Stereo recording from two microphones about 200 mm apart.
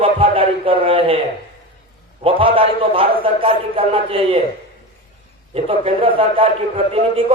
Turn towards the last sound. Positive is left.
turn(degrees=-25)  # may be behind; listen again after turning